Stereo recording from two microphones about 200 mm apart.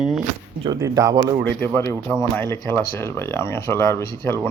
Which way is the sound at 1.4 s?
5° left (ahead or behind).